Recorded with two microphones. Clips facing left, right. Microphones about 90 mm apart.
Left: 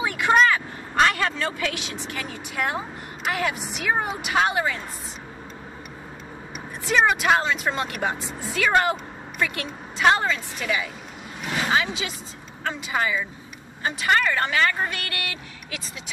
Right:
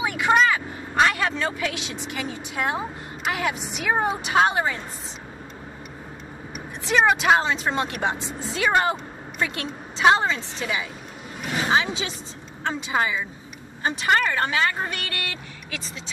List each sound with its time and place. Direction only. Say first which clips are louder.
0.0 s vehicle: even; 15° right (ahead or behind)
0.3 s a woman's voice: left 1 dB; 10° right (ahead or behind); by 4.7 s 30° right (ahead or behind)
6.9 s a woman's voice: right 1 dB; 25° right (ahead or behind)